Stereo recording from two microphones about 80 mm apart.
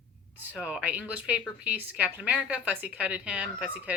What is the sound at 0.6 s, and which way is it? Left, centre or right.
Speech, centre.